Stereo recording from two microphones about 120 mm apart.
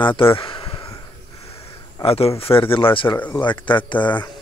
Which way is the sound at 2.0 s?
55° left (ahead or behind).